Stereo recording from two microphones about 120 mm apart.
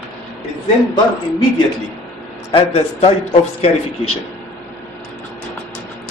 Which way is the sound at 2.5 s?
55° left (ahead or behind).